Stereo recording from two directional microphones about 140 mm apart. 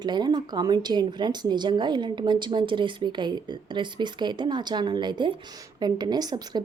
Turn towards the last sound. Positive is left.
turn(degrees=-30)  # may be behind; listen again after turning